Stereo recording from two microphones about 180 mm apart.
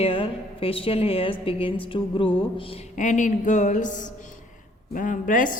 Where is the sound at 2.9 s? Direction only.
45° left (ahead or behind).